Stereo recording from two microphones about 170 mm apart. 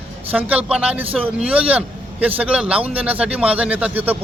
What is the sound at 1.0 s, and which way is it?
Speech, 35° right (ahead or behind).